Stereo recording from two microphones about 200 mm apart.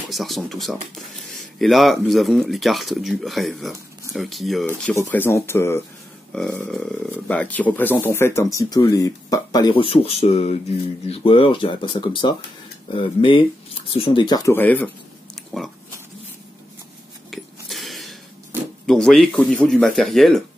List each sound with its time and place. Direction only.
0.1 s speech: centre (ahead or behind)
17.3 s a sound: centre (ahead or behind)
18.9 s speech: centre (ahead or behind)